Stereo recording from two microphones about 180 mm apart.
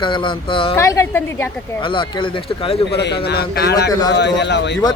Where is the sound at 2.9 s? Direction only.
70° left (ahead or behind).